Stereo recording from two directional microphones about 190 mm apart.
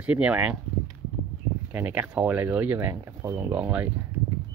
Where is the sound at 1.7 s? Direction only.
10° right (ahead or behind).